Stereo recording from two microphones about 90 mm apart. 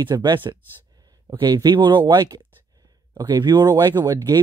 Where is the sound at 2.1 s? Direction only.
40° right (ahead or behind).